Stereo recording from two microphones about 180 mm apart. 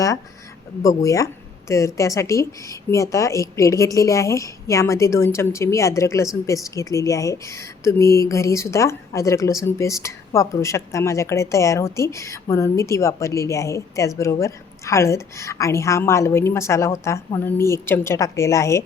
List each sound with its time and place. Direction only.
0.8 s speech: 20° left (ahead or behind)